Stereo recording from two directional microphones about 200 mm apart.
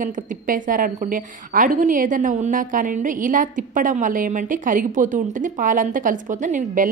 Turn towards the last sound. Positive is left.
turn(degrees=-40)  # may be behind; listen again after turning